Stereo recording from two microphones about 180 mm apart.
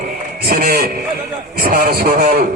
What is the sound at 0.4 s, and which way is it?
A man's voice, 55° right (ahead or behind).